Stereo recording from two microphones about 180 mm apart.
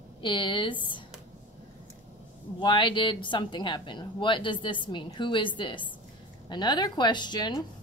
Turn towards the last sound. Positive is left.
turn(degrees=25)  # may be behind; listen again after turning